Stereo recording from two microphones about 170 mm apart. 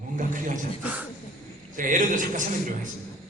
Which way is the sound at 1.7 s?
50° right (ahead or behind).